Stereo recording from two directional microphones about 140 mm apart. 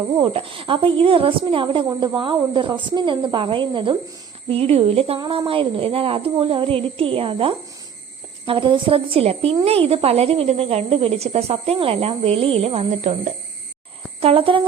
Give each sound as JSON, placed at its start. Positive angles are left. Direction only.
{"t": 0.2, "sound": "a woman's voice", "side_deg": -40}